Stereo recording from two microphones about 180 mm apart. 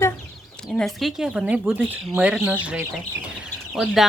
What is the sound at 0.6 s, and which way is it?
Speech, centre (ahead or behind).